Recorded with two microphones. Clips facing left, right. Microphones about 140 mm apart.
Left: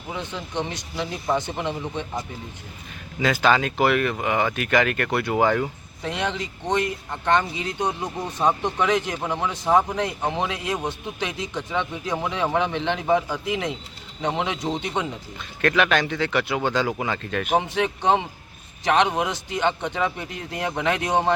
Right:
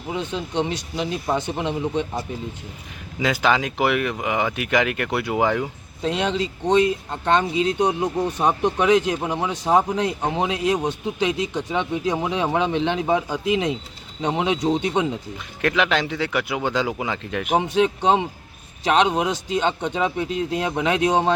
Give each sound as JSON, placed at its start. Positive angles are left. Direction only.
{"t": 0.1, "sound": "speech", "side_deg": -20}
{"t": 3.2, "sound": "speech", "side_deg": -15}